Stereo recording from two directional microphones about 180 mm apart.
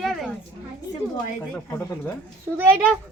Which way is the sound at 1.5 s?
10° left (ahead or behind).